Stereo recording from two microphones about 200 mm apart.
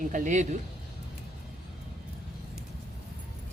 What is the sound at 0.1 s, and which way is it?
Speech, 35° right (ahead or behind).